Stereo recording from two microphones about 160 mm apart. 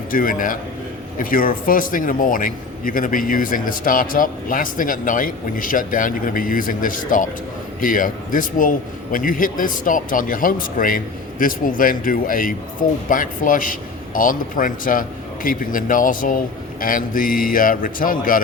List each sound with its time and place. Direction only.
0.1 s a man's voice: 60° left (ahead or behind)